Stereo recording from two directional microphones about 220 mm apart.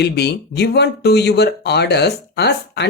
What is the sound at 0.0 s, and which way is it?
Speech, 50° left (ahead or behind).